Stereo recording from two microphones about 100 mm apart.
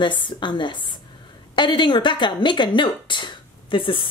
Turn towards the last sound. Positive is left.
turn(degrees=55)  # may be behind; listen again after turning